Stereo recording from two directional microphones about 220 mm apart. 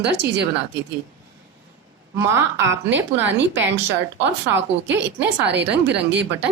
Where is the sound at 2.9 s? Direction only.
55° right (ahead or behind).